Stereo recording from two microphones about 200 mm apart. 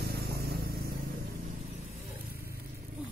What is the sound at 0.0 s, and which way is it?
Vehicle, 55° right (ahead or behind).